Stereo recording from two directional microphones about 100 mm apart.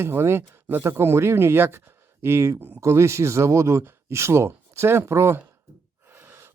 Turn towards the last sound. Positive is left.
turn(degrees=-25)  # may be behind; listen again after turning